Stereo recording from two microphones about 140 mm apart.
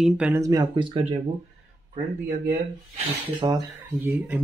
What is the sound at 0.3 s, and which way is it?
Speech, 25° right (ahead or behind).